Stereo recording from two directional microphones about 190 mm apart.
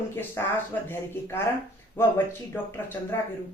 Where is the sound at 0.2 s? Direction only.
10° left (ahead or behind).